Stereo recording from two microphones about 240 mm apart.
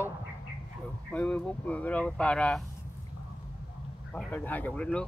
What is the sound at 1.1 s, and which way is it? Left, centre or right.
Speech, centre.